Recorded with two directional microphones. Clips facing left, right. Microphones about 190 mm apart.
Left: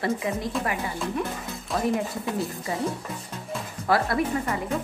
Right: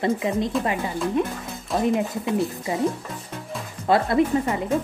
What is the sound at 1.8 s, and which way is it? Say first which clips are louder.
Speech: right 4 dB; 20° right (ahead or behind).